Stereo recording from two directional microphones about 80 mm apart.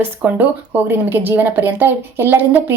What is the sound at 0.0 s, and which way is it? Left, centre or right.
A woman's voice, centre.